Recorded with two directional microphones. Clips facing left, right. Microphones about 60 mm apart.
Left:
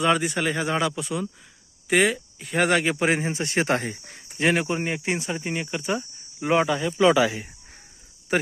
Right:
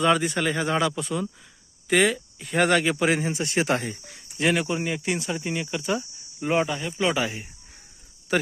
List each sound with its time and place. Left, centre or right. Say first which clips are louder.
0.0 s speech: even; centre
2.6 s speech: even; centre
3.0 s speech: even; left
3.3 s speech: left 1 dB; left
6.4 s speech: left 2 dB; left
7.3 s speech: left 4 dB; left
8.3 s cricket: even; centre